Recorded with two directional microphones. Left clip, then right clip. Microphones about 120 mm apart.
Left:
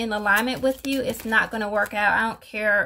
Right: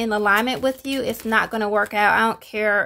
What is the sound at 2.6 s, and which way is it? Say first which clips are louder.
Speech: right 1 dB; 45° right (ahead or behind).